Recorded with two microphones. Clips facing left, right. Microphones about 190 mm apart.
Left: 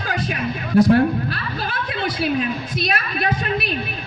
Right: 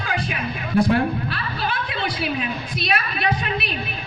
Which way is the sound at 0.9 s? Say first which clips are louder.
Left 4 dB; 40° left (ahead or behind).